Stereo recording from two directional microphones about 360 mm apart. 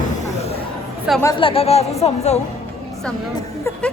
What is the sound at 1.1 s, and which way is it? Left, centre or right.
Speech, centre.